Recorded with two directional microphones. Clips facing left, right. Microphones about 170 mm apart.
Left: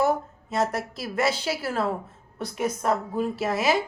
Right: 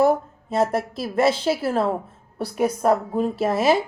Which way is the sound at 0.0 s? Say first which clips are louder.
Right 5 dB; 30° right (ahead or behind).